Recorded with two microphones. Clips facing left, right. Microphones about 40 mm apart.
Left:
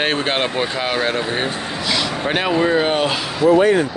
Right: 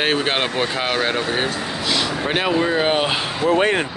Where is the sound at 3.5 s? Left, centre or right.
Right.